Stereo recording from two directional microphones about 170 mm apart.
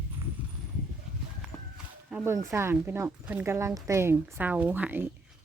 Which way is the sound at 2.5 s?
15° right (ahead or behind).